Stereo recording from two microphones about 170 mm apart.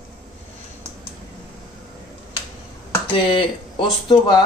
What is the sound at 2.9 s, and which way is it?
Speech, 30° left (ahead or behind).